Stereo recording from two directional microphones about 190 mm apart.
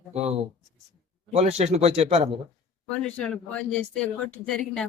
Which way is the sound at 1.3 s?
35° right (ahead or behind).